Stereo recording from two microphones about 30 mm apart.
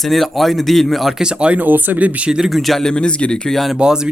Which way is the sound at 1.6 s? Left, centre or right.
Right.